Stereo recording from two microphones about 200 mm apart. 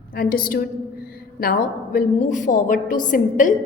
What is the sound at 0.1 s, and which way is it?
A woman's voice, 45° left (ahead or behind).